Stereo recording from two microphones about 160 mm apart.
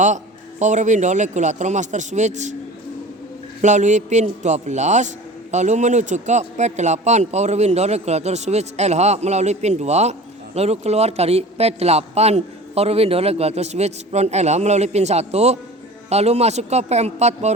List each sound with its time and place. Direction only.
0.6 s a man's voice: 50° right (ahead or behind)
3.6 s a man's voice: 50° right (ahead or behind)